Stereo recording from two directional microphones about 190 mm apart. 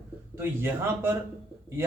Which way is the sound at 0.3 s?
10° right (ahead or behind).